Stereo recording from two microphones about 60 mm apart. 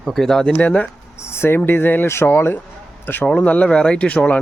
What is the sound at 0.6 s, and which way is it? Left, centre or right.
Speech, left.